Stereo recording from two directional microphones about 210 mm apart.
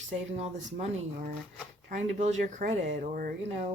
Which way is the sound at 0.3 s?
30° right (ahead or behind).